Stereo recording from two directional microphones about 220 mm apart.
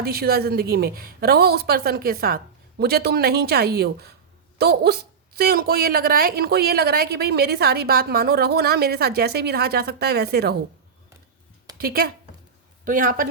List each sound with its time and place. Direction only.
0.0 s a woman's voice: 45° right (ahead or behind)
11.8 s a woman's voice: 45° right (ahead or behind)